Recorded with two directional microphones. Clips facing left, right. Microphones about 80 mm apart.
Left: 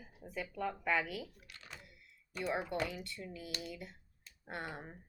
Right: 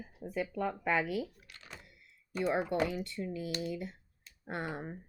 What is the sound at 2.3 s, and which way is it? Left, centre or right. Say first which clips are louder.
Speech: right 6 dB; right.